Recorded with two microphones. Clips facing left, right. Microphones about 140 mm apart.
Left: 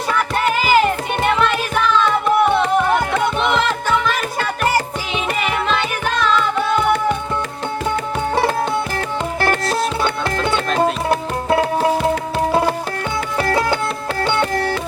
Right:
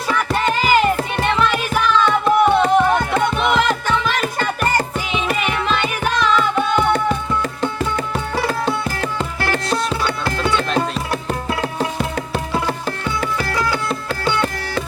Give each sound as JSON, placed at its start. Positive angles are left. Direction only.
{"t": 0.1, "sound": "music", "side_deg": 5}
{"t": 13.5, "sound": "music", "side_deg": 25}